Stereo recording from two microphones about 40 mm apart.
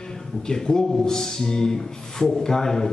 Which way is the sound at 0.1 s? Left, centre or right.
Centre.